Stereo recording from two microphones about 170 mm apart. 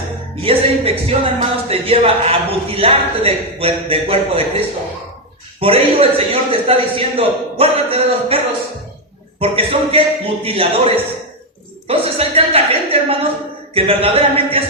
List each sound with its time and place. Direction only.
0.4 s speech: 35° right (ahead or behind)
9.4 s speech: 35° right (ahead or behind)